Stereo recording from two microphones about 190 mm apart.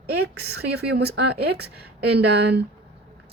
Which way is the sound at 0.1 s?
55° right (ahead or behind).